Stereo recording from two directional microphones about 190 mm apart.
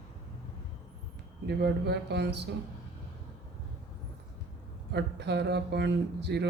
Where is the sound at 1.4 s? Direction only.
60° right (ahead or behind).